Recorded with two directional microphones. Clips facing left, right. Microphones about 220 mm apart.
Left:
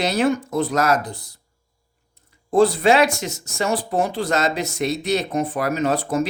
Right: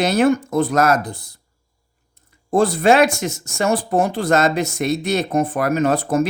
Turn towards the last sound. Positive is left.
turn(degrees=-50)  # may be behind; listen again after turning